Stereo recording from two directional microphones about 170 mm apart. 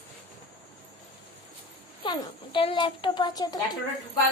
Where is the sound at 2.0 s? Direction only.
30° left (ahead or behind).